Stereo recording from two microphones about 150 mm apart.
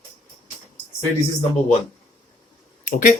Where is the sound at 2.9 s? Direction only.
55° left (ahead or behind).